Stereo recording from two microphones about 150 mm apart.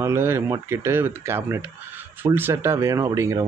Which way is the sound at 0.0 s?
15° right (ahead or behind).